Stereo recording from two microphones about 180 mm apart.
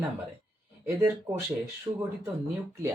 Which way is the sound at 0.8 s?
15° right (ahead or behind).